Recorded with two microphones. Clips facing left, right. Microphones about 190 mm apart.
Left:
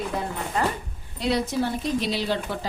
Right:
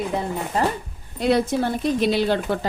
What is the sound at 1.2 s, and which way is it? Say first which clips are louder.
A woman's voice: right 4 dB; 55° right (ahead or behind).